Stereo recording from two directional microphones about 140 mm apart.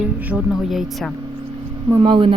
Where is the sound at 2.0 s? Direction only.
40° right (ahead or behind).